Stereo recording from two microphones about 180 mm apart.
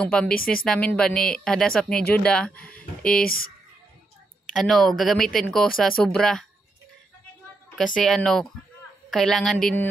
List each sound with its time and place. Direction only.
0.0 s a woman's voice: 5° left (ahead or behind)
0.3 s speech: 55° left (ahead or behind)
0.7 s a woman's voice: 5° left (ahead or behind)
3.3 s speech: 55° left (ahead or behind)
4.5 s a woman's voice: 5° left (ahead or behind)
7.7 s a woman's voice: 5° left (ahead or behind)